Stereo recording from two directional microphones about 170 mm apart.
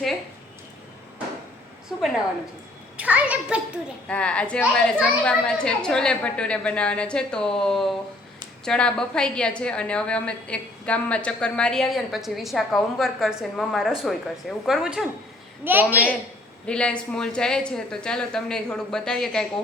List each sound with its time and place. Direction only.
1.9 s a woman's voice: centre (ahead or behind)
4.1 s a woman's voice: 5° left (ahead or behind); by 16.0 s 10° right (ahead or behind)
16.6 s a woman's voice: 5° left (ahead or behind)